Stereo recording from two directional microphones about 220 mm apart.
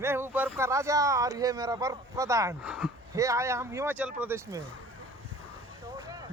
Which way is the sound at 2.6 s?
5° right (ahead or behind).